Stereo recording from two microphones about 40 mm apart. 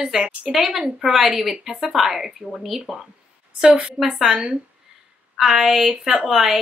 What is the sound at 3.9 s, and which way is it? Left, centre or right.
Speech, centre.